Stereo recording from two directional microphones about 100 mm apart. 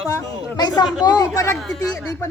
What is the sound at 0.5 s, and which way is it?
Speech, 45° left (ahead or behind).